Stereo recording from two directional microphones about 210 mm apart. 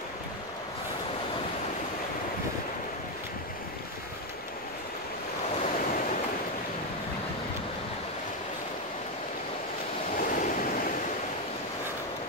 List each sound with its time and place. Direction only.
10.1 s waves: 40° left (ahead or behind)